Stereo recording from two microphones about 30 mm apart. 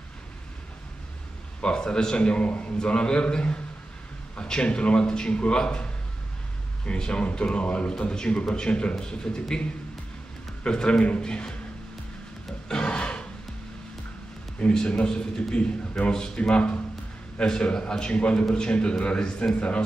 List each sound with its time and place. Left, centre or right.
1.6 s a man's voice: left
7.0 s a man's voice: left
10.6 s a man's voice: left
12.6 s a sound: left
14.7 s a man's voice: left
16.0 s a man's voice: centre
16.3 s a man's voice: left
17.4 s a man's voice: left
17.8 s a man's voice: left